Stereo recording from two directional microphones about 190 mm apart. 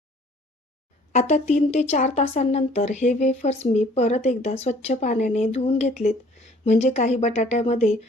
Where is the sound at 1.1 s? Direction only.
35° left (ahead or behind).